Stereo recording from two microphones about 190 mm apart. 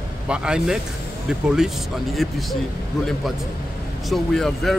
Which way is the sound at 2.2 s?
Centre (ahead or behind).